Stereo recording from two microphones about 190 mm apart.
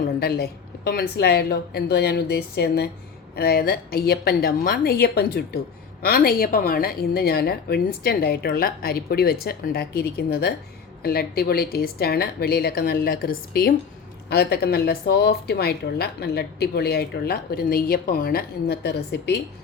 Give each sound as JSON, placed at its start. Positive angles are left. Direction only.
{"t": 0.0, "sound": "a woman's voice", "side_deg": 55}